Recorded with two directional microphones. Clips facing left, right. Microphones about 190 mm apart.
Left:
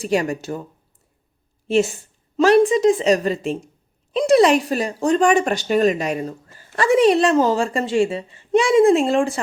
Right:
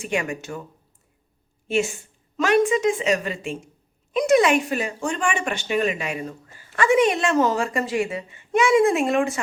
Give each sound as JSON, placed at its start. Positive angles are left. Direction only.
{"t": 0.0, "sound": "speech", "side_deg": 35}
{"t": 1.6, "sound": "a woman's voice", "side_deg": 35}